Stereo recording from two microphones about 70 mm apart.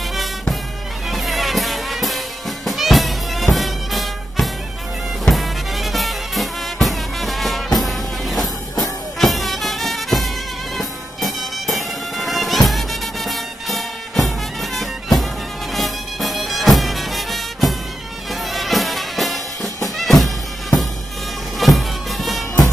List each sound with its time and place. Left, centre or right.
0.1 s music: centre
21.5 s music: centre